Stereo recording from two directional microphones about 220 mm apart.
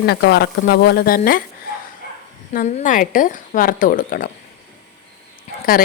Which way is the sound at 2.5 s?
35° left (ahead or behind).